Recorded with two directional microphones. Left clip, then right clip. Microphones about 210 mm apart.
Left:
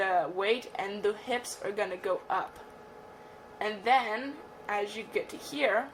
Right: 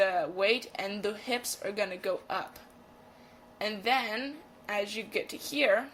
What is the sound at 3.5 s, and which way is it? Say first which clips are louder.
Speech: left 3 dB; 25° right (ahead or behind).